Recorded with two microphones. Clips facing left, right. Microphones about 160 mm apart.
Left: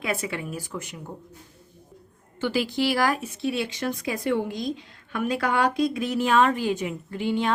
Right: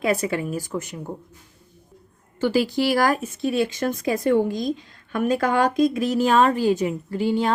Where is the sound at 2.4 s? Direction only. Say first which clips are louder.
Right 4 dB; 40° right (ahead or behind).